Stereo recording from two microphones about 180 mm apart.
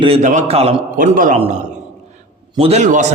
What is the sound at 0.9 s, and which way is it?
Speech, 45° right (ahead or behind).